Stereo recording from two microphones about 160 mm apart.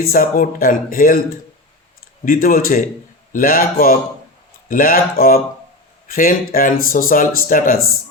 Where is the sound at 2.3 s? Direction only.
60° left (ahead or behind).